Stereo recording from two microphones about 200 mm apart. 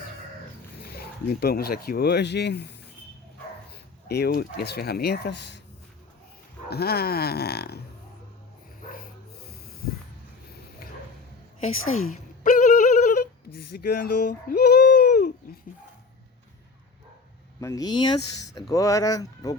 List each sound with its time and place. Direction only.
0.8 s speech: 50° left (ahead or behind)
4.1 s speech: 50° left (ahead or behind)
6.7 s speech: 50° left (ahead or behind)
8.9 s dog: 50° left (ahead or behind)
11.8 s a woman's voice: 90° left
12.1 s yodeling: 40° left (ahead or behind)
13.5 s speech: 50° left (ahead or behind)
17.6 s speech: 15° left (ahead or behind)